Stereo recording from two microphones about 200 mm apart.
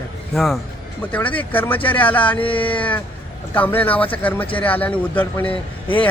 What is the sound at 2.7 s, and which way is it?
A man's voice, 5° left (ahead or behind).